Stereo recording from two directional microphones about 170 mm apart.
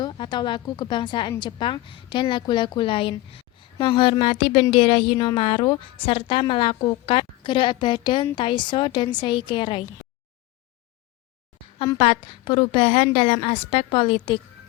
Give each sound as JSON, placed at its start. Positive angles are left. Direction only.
{"t": 0.0, "sound": "a woman's voice", "side_deg": 25}
{"t": 11.9, "sound": "a woman's voice", "side_deg": 35}